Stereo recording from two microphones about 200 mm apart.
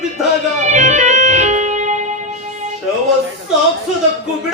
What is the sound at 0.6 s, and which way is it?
Music, 35° right (ahead or behind).